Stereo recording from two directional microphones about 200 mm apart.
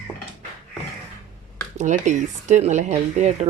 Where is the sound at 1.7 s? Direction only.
35° right (ahead or behind).